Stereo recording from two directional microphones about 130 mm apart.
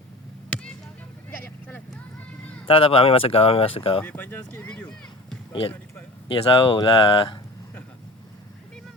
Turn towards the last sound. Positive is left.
turn(degrees=40)  # may be behind; listen again after turning